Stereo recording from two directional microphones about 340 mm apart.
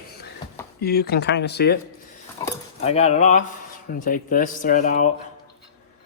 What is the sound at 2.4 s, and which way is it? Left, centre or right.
Speech, centre.